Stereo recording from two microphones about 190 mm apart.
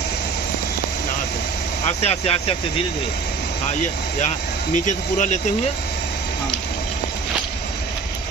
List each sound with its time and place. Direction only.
1.9 s speech: 35° left (ahead or behind)
4.8 s speech: 40° left (ahead or behind)